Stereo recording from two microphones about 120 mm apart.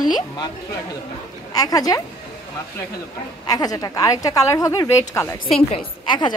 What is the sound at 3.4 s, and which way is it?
A woman's voice, 30° left (ahead or behind).